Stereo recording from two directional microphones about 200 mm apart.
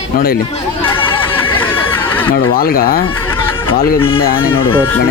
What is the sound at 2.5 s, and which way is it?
Speech, 45° left (ahead or behind).